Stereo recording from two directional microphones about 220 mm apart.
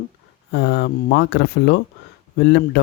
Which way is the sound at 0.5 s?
55° left (ahead or behind).